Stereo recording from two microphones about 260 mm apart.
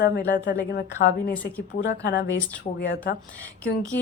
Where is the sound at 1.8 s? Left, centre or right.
Left.